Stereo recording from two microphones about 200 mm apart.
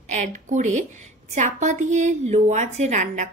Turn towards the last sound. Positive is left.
turn(degrees=-40)  # may be behind; listen again after turning